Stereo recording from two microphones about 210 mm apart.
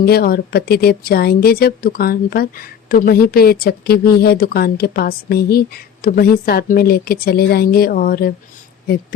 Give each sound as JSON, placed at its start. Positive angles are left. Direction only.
{"t": 0.0, "sound": "a woman's voice", "side_deg": 45}